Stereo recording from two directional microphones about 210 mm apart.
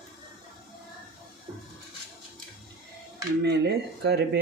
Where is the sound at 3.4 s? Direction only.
50° right (ahead or behind).